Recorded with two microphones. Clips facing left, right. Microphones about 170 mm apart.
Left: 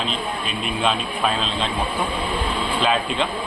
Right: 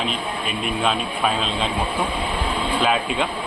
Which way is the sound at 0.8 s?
5° right (ahead or behind).